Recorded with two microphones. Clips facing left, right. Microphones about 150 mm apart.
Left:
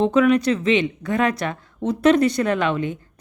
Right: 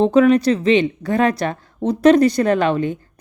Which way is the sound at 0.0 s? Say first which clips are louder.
Right 4 dB; 35° right (ahead or behind).